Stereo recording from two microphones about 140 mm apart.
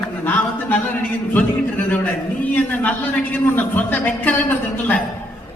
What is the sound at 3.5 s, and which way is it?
A man's voice, 15° left (ahead or behind).